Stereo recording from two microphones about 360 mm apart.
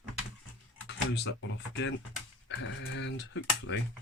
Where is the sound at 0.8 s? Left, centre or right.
Left.